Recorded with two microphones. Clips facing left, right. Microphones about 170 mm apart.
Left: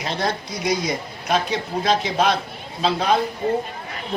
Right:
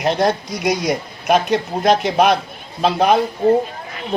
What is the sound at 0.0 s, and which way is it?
Speech, 65° right (ahead or behind).